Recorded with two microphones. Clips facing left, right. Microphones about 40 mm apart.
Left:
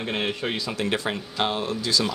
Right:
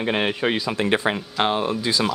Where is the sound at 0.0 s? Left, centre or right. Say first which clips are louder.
Right 5 dB; right.